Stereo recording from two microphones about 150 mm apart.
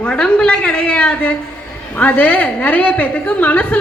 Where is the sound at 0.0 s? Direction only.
10° left (ahead or behind).